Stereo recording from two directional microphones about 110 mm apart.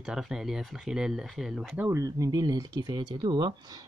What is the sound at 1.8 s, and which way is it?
Speech, 25° right (ahead or behind).